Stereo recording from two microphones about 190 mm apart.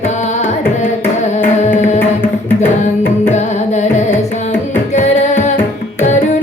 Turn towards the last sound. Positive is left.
turn(degrees=35)  # may be behind; listen again after turning